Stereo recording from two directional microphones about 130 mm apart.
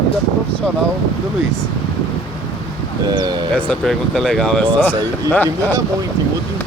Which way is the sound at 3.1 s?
35° right (ahead or behind).